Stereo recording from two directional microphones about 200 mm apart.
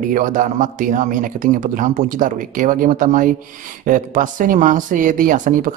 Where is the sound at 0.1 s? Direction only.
40° right (ahead or behind).